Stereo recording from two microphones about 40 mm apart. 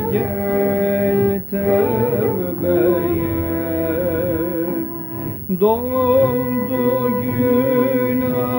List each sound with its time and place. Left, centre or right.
0.1 s music: centre
1.6 s music: centre
5.5 s a sound: centre
6.1 s music: left